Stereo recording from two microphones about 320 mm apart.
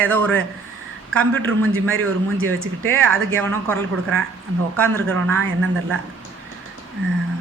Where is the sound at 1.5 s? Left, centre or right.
Right.